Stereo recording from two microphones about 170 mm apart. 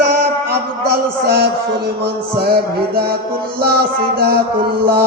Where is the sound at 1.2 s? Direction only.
75° right (ahead or behind).